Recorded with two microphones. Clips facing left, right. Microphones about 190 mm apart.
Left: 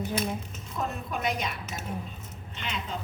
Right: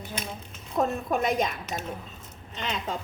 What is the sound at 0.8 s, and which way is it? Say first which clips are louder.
Speech: right 7 dB; 45° right (ahead or behind).